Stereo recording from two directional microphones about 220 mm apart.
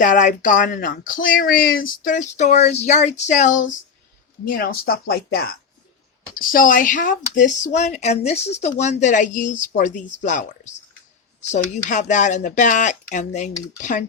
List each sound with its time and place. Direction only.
0.0 s speech: 35° left (ahead or behind)